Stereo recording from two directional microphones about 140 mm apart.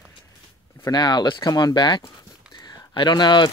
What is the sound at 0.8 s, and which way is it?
Speech, 30° left (ahead or behind).